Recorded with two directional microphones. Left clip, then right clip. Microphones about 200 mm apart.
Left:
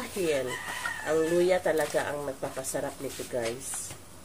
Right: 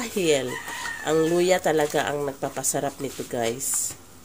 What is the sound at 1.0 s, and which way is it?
Speech, 50° right (ahead or behind).